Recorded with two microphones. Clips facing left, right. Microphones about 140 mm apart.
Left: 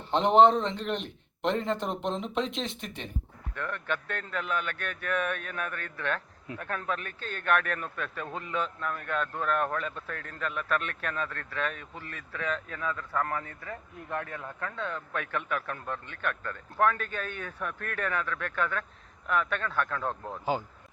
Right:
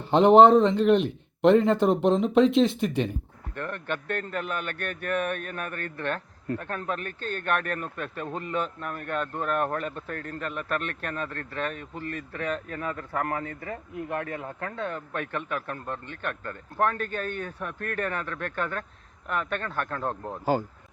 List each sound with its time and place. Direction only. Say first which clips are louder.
0.0 s speech: right 5 dB; 5° right (ahead or behind)
3.5 s a man's voice: right 2 dB; 40° right (ahead or behind); by 14.4 s 60° right (ahead or behind)
14.6 s speech: even; 50° right (ahead or behind); by 20.1 s 35° right (ahead or behind)
20.2 s speech: right 3 dB; 10° right (ahead or behind)